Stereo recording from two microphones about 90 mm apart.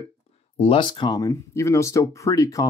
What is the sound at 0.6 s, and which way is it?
Speech, 65° left (ahead or behind).